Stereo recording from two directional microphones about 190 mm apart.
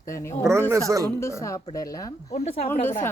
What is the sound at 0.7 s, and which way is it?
Speech, 15° right (ahead or behind).